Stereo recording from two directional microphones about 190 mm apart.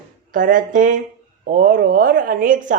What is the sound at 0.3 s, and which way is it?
Speech, 45° right (ahead or behind).